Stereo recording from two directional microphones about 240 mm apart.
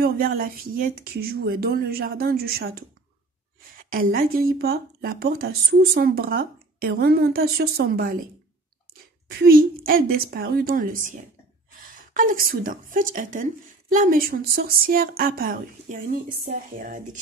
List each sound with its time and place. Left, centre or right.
0.0 s a woman's voice: right
3.9 s a woman's voice: right